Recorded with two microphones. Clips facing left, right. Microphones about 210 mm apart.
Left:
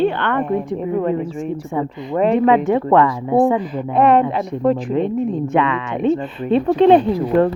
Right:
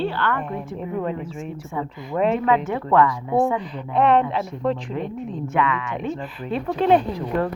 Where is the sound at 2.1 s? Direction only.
Centre (ahead or behind).